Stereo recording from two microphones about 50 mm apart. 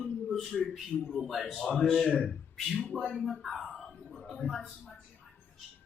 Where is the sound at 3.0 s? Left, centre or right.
Centre.